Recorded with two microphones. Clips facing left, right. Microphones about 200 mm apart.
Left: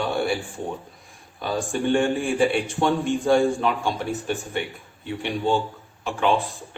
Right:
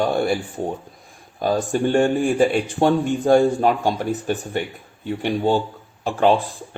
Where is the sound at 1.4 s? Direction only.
40° right (ahead or behind).